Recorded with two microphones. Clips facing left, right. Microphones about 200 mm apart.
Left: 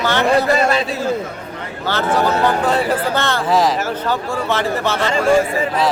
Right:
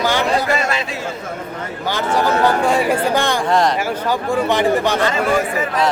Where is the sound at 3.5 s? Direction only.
5° left (ahead or behind).